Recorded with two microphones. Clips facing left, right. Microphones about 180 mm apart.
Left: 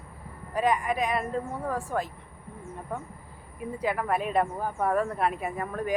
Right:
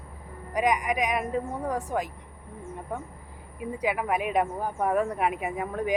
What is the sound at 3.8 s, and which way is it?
Speech, 10° right (ahead or behind).